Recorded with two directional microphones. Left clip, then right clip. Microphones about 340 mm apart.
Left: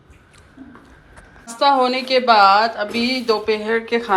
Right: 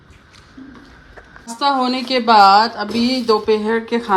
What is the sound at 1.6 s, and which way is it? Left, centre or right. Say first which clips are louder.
Speech: left 2 dB; centre.